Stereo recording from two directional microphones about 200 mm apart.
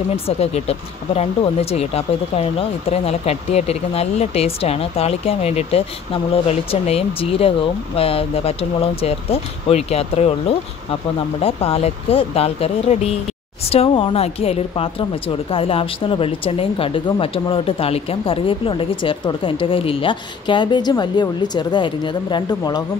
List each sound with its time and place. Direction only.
0.1 s speech: 30° left (ahead or behind)